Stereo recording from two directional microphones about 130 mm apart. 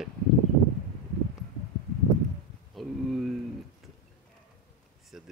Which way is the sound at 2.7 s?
Centre (ahead or behind).